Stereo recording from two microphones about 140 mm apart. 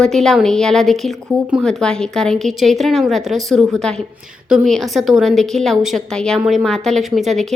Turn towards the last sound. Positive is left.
turn(degrees=0)  # may be behind; listen again after turning